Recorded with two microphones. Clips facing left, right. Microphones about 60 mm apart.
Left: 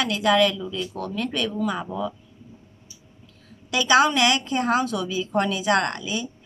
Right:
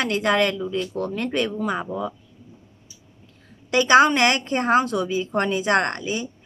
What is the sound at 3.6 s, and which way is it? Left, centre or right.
Speech, right.